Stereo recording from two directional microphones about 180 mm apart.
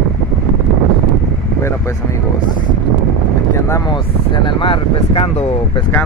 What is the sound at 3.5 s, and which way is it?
Speech, 15° left (ahead or behind).